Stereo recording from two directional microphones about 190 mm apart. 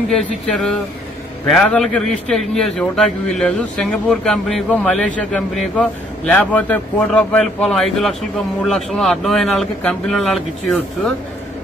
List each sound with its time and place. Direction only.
0.1 s a man's voice: 5° left (ahead or behind)